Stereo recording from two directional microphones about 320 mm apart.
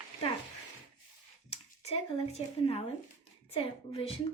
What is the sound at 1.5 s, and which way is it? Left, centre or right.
Speech, centre.